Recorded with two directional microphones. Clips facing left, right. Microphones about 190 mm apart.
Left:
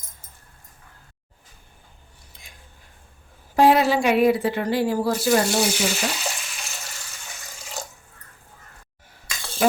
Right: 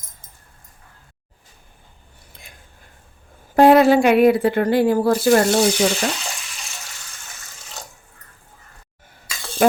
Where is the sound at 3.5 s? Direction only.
55° right (ahead or behind).